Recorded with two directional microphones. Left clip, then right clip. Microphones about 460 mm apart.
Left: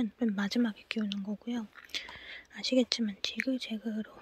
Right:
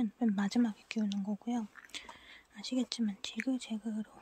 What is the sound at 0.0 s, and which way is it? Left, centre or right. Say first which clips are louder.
Speech: left 1 dB; centre.